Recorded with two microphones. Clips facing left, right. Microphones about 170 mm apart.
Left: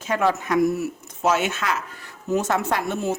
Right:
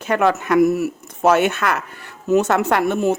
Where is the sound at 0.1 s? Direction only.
70° right (ahead or behind).